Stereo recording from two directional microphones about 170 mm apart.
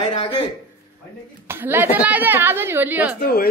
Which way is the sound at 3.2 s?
65° left (ahead or behind).